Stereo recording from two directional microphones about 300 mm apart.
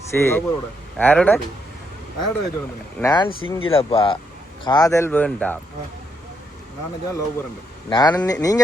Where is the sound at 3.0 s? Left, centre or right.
Centre.